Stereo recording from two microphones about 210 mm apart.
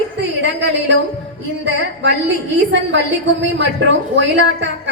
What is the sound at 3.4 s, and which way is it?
A woman's voice, 60° right (ahead or behind).